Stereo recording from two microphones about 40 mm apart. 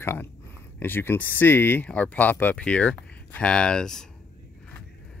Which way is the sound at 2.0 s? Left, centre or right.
Left.